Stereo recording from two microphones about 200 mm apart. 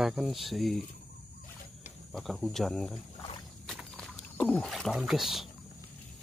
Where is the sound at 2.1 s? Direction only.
Centre (ahead or behind).